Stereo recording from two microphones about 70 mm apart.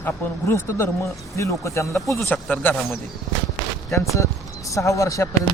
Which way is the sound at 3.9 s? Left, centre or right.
Left.